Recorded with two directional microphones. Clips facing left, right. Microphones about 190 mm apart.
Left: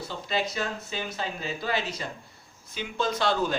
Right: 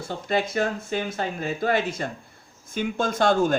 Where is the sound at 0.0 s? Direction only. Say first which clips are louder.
Right 4 dB; 50° right (ahead or behind).